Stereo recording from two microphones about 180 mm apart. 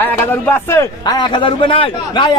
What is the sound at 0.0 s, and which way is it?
A man's voice, 10° left (ahead or behind).